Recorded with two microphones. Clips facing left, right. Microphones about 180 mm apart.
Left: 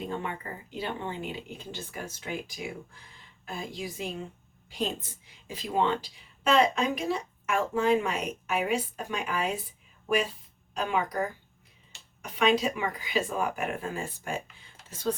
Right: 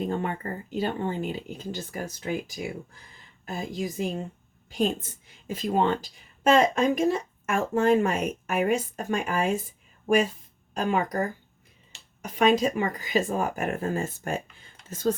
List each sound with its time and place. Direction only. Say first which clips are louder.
0.0 s a woman's voice: right 5 dB; 45° right (ahead or behind)
3.4 s a woman's voice: right 5 dB; 45° right (ahead or behind)
10.8 s a woman's voice: right 3 dB; 45° right (ahead or behind)